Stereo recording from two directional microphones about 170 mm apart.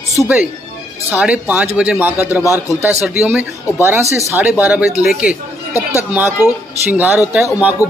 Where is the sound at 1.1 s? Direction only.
10° right (ahead or behind).